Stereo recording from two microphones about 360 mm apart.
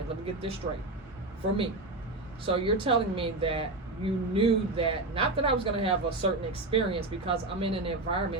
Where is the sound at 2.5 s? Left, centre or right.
Centre.